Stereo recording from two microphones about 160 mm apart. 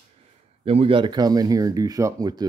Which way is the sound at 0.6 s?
35° right (ahead or behind).